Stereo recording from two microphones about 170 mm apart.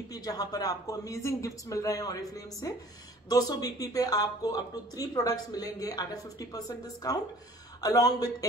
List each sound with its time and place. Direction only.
0.1 s speech: 20° left (ahead or behind)